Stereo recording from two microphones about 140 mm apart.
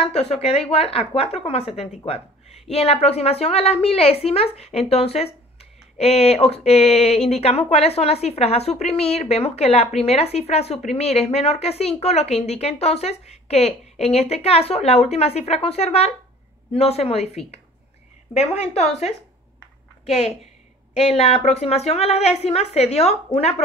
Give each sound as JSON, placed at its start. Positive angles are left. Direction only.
{"t": 0.1, "sound": "a woman's voice", "side_deg": 50}